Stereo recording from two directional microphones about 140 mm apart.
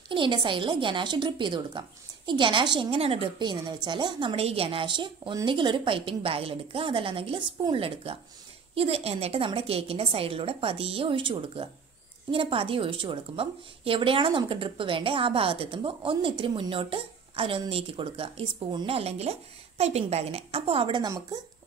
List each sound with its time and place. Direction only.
0.1 s a woman's voice: 35° right (ahead or behind)